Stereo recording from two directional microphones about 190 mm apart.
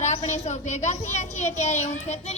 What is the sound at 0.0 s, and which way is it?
A woman's voice, 35° left (ahead or behind).